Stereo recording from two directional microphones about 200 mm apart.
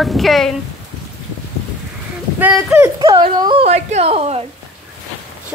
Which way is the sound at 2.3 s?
10° right (ahead or behind).